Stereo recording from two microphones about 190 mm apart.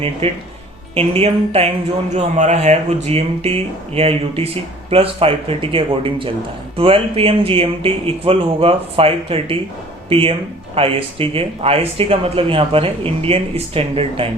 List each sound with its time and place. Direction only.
0.2 s speech: 30° right (ahead or behind)